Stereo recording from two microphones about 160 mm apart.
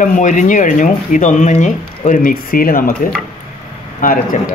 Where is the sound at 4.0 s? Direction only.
60° left (ahead or behind).